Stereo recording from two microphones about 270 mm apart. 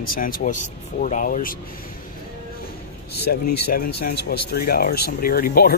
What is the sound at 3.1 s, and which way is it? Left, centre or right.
Speech, left.